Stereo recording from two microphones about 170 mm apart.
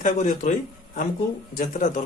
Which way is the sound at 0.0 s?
45° left (ahead or behind).